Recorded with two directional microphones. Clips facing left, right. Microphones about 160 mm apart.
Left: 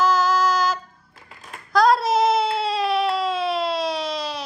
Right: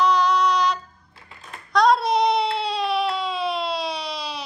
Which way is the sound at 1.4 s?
Centre (ahead or behind).